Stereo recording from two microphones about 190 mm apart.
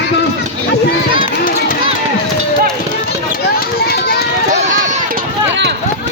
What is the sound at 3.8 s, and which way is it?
Run, 55° left (ahead or behind).